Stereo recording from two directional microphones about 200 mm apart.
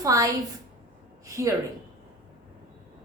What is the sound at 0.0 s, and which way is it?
Speech, 15° right (ahead or behind).